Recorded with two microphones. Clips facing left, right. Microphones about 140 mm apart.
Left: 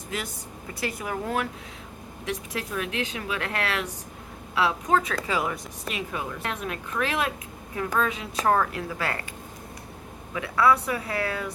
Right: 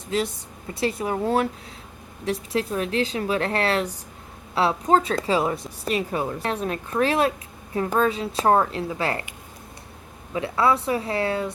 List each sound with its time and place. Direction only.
0.1 s a woman's voice: 30° right (ahead or behind)
10.3 s a woman's voice: 25° right (ahead or behind)